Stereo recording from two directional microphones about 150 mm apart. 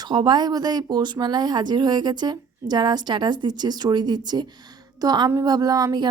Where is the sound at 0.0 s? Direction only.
30° right (ahead or behind).